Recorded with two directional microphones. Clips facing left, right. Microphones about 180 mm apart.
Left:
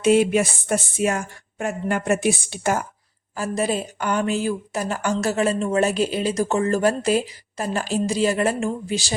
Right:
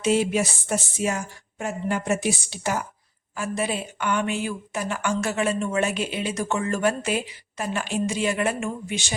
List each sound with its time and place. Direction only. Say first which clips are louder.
0.0 s speech: left 5 dB; 55° left (ahead or behind)
3.3 s a woman's voice: left 4 dB; 40° left (ahead or behind)